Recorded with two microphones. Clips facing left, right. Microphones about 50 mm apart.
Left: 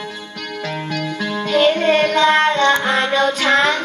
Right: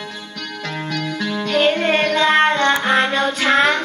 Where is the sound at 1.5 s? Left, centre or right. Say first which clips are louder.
Left 2 dB; right.